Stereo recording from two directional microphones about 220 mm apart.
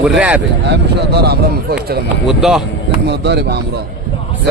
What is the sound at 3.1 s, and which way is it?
Speech, 50° right (ahead or behind).